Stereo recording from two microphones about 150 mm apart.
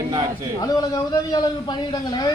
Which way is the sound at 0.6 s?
25° left (ahead or behind).